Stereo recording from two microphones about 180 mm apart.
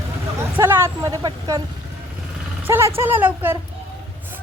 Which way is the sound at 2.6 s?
10° right (ahead or behind).